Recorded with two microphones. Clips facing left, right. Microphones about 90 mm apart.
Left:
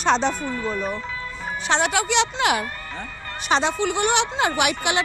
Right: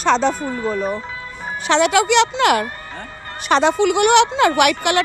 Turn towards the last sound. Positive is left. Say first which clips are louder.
# right 6 dB
turn(degrees=-60)  # may be behind; listen again after turning